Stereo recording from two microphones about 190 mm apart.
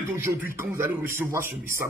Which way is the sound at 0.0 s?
15° right (ahead or behind).